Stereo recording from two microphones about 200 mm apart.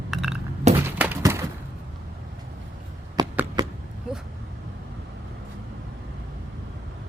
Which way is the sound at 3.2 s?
20° right (ahead or behind).